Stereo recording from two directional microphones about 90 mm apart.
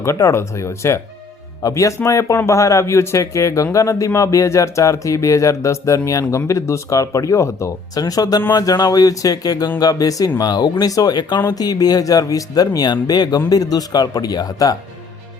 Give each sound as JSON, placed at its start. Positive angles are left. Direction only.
{"t": 0.0, "sound": "speech", "side_deg": 35}